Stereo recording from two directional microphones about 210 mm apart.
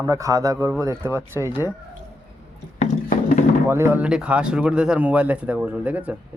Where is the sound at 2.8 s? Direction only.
35° left (ahead or behind).